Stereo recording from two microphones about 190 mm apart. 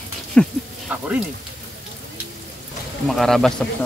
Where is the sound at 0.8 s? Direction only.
5° right (ahead or behind).